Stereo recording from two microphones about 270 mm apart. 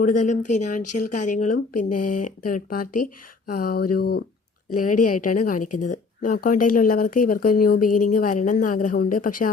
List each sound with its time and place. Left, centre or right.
0.0 s a woman's voice: left